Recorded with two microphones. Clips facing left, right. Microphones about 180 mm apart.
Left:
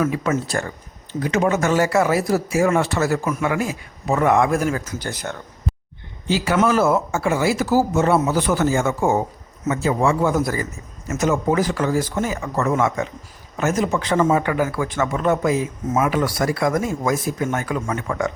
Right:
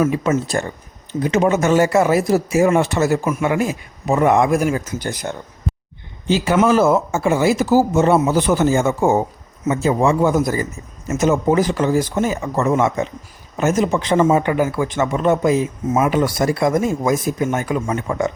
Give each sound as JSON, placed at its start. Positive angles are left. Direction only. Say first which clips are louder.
{"t": 0.0, "sound": "speech", "louder": "right 3 dB", "side_deg": -25}
{"t": 5.7, "sound": "a sound", "louder": "right 2 dB", "side_deg": 0}
{"t": 6.2, "sound": "speech", "louder": "right 3 dB", "side_deg": -20}